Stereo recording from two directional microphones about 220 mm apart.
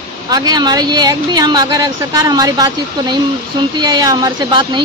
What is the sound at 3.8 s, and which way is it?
A woman's voice, 20° right (ahead or behind).